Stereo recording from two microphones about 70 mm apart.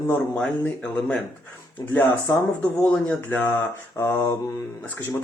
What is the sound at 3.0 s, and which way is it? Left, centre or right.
Speech, left.